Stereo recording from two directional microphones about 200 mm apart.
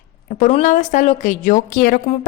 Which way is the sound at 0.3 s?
40° left (ahead or behind).